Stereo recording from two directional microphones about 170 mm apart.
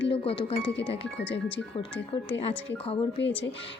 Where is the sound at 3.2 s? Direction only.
90° left.